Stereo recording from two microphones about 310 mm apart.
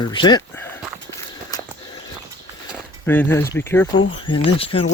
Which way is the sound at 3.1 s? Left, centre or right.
Centre.